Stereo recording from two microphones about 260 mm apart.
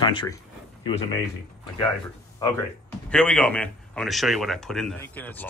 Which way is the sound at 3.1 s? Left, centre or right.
Centre.